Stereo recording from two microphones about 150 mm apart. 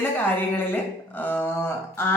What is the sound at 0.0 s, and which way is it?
Speech, 15° left (ahead or behind).